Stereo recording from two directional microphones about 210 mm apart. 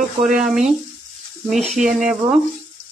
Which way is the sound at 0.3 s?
5° right (ahead or behind).